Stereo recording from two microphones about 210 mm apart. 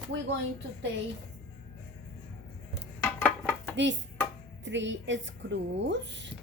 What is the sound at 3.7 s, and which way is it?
A woman's voice, 60° right (ahead or behind).